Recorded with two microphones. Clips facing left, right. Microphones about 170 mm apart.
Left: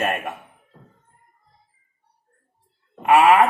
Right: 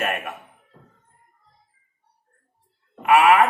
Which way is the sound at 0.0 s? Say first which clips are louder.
Left 2 dB; 30° left (ahead or behind).